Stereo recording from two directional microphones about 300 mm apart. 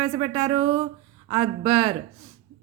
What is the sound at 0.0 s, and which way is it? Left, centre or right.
A woman's voice, centre.